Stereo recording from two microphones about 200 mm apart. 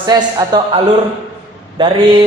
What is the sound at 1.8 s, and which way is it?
Speech, 25° right (ahead or behind).